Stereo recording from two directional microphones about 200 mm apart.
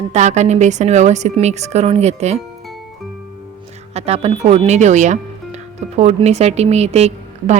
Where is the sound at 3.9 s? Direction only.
30° right (ahead or behind).